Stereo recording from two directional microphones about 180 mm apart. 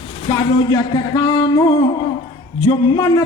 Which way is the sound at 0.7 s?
20° left (ahead or behind).